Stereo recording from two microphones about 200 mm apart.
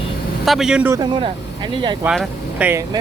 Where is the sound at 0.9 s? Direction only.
25° right (ahead or behind).